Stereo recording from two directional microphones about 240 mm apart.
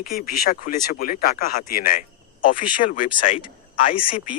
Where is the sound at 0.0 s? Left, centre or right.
Left.